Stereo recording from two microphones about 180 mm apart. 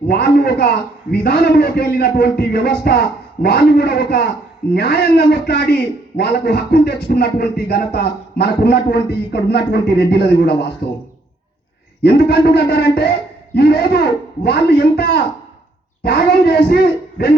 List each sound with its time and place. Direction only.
0.1 s a man's voice: 65° left (ahead or behind)
12.0 s a man's voice: 65° left (ahead or behind)